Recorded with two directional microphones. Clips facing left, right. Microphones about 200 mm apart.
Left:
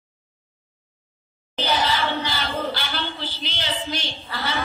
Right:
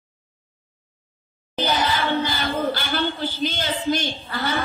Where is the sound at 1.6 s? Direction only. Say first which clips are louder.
Right 1 dB; 50° right (ahead or behind).